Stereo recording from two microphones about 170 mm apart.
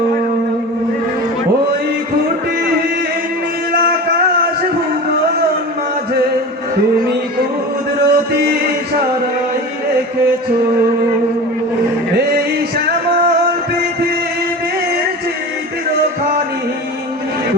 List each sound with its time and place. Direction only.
8.1 s music: 65° right (ahead or behind)